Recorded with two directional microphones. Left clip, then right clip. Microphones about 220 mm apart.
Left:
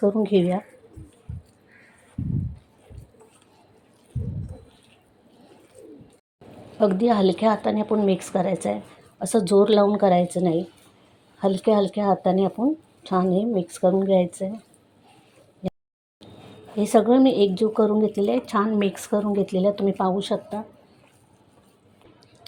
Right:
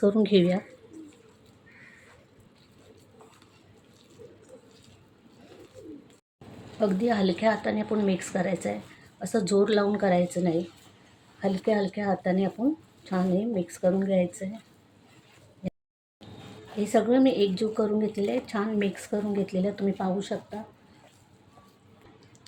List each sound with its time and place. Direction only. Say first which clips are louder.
0.0 s speech: left 2 dB; centre (ahead or behind)
6.7 s speech: left 6 dB; 25° left (ahead or behind)
15.6 s a sound: left 6 dB; 25° left (ahead or behind)
16.7 s speech: left 5 dB; 25° left (ahead or behind)